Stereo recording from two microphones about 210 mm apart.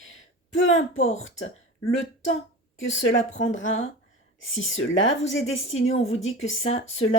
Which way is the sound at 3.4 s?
65° left (ahead or behind).